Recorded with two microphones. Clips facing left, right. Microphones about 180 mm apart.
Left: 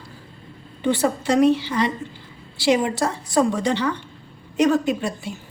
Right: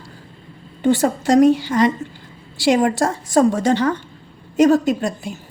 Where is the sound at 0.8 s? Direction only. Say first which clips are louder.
Right 4 dB; 45° right (ahead or behind).